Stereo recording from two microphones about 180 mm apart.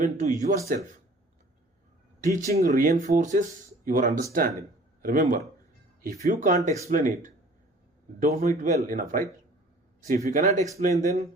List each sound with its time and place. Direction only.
0.0 s speech: 45° right (ahead or behind)
2.2 s speech: 45° right (ahead or behind)